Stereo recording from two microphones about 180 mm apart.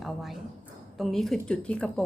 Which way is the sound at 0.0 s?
Centre (ahead or behind).